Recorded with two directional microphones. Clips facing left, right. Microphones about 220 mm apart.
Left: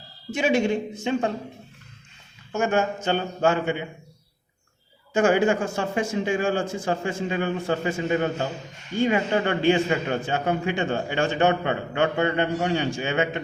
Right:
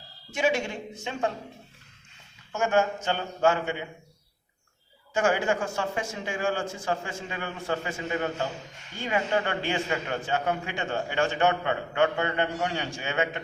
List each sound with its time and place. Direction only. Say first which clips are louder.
0.3 s a man's voice: left 5 dB; 20° left (ahead or behind)
2.5 s a man's voice: left 2 dB; 20° left (ahead or behind)
5.1 s a man's voice: left 6 dB; 20° left (ahead or behind)